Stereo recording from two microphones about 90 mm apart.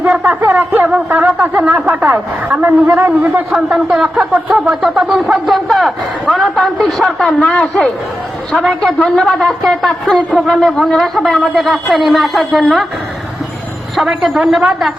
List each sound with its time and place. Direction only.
0.3 s speech: 15° right (ahead or behind)
3.5 s speech: 5° right (ahead or behind)
9.0 s speech: 5° left (ahead or behind)
13.9 s speech: 5° right (ahead or behind)